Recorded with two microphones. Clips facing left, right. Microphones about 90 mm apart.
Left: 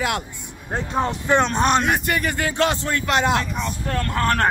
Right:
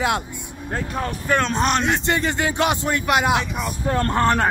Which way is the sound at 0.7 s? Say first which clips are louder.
Left 3 dB; 25° left (ahead or behind).